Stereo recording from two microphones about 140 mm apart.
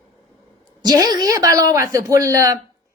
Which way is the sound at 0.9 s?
25° right (ahead or behind).